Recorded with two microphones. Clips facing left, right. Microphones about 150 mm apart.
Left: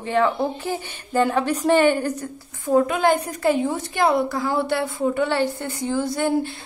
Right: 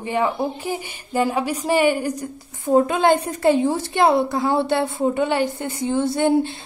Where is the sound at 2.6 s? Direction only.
30° right (ahead or behind).